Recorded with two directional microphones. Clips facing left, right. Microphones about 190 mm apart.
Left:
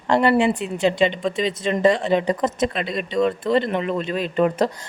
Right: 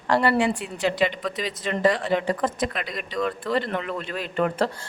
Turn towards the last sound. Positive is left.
turn(degrees=20)  # may be behind; listen again after turning